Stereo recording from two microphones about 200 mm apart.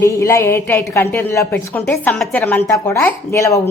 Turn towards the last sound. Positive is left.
turn(degrees=15)  # may be behind; listen again after turning